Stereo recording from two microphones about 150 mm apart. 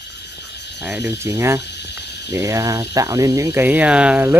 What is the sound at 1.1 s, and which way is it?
Cricket, 20° right (ahead or behind).